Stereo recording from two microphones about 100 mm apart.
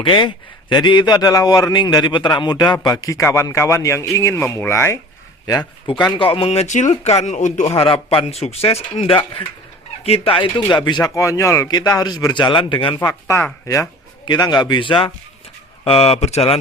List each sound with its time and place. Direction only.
0.0 s a man's voice: 50° left (ahead or behind); by 4.9 s 25° left (ahead or behind)
5.5 s speech: 45° left (ahead or behind)
6.1 s a man's voice: 60° left (ahead or behind)
10.0 s a man's voice: 80° left; by 11.1 s 50° left (ahead or behind)
11.1 s speech: 30° left (ahead or behind)
11.7 s a man's voice: 40° left (ahead or behind); by 13.0 s 60° left (ahead or behind)
13.0 s speech: 30° left (ahead or behind)
14.3 s a man's voice: 45° left (ahead or behind)
15.8 s a man's voice: 75° left (ahead or behind)